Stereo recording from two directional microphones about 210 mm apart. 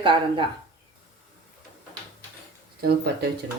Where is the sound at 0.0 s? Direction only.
25° right (ahead or behind).